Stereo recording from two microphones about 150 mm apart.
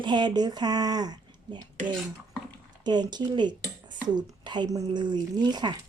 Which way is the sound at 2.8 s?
30° right (ahead or behind).